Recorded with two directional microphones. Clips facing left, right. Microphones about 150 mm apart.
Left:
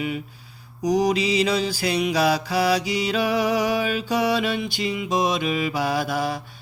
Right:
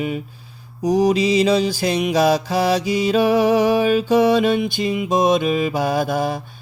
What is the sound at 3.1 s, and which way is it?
Mantra, 35° right (ahead or behind).